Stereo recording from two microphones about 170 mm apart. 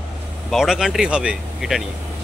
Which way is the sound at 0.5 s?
Centre (ahead or behind).